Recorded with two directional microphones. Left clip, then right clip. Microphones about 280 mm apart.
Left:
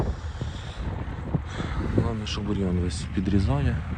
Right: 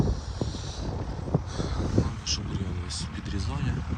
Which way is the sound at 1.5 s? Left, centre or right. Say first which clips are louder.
Left 1 dB; centre.